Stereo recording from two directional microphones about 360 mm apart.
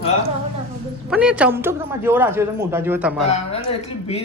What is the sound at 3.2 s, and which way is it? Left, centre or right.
Speech, centre.